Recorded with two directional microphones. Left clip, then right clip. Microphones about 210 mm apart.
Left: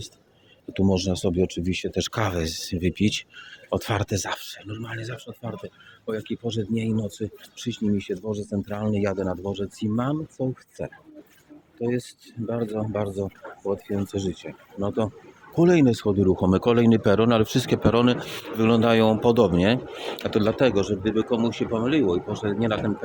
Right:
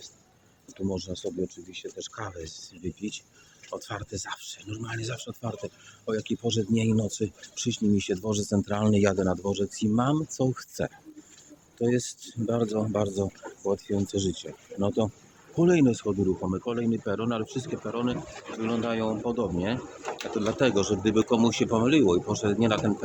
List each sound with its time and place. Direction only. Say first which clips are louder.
0.7 s speech: left 9 dB; 35° left (ahead or behind)
4.5 s speech: left 2 dB; 5° left (ahead or behind)
8.0 s speech: even; 20° right (ahead or behind)
10.3 s speech: right 1 dB; 20° right (ahead or behind)
15.5 s speech: left 4 dB; 15° left (ahead or behind)
16.5 s speech: left 10 dB; 45° left (ahead or behind)
20.3 s speech: left 7 dB; 30° left (ahead or behind)
20.6 s speech: left 3 dB; 15° left (ahead or behind)
21.0 s speech: even; 5° right (ahead or behind)